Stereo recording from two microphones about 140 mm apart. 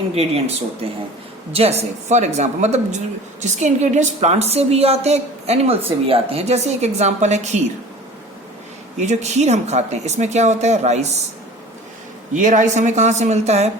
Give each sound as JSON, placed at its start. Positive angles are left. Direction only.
{"t": 0.1, "sound": "a woman's voice", "side_deg": -45}
{"t": 9.0, "sound": "a woman's voice", "side_deg": -55}
{"t": 12.3, "sound": "speech", "side_deg": -60}